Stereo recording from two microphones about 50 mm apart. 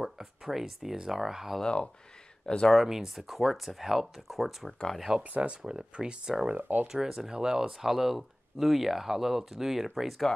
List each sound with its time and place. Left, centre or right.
0.0 s speech: centre
1.6 s speech: centre
2.7 s speech: centre
5.3 s speech: right
6.5 s speech: right
6.9 s speech: centre